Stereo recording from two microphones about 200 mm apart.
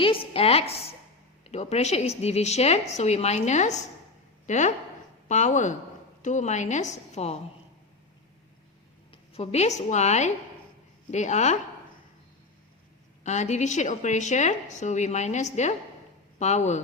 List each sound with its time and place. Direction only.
0.0 s a woman's voice: 25° left (ahead or behind)
9.3 s a woman's voice: 30° left (ahead or behind)
13.2 s a woman's voice: 35° left (ahead or behind)